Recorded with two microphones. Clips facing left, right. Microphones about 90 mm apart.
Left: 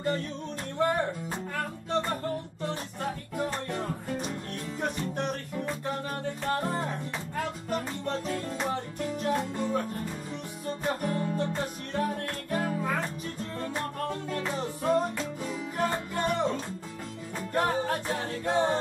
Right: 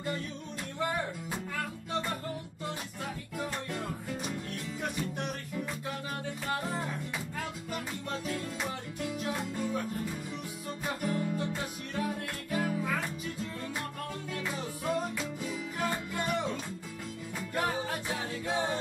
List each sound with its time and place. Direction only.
0.7 s music: 50° left (ahead or behind)
10.9 s music: 40° left (ahead or behind)
17.6 s music: 45° left (ahead or behind)